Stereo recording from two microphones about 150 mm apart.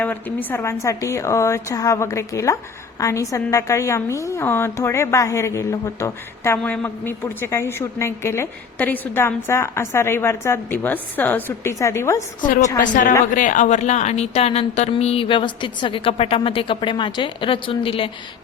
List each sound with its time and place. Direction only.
0.0 s a woman's voice: 10° left (ahead or behind)
12.8 s a woman's voice: 60° left (ahead or behind); by 18.1 s 35° left (ahead or behind)